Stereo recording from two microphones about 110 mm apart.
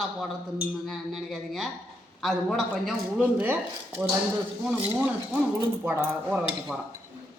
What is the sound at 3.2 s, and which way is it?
Speech, 15° right (ahead or behind).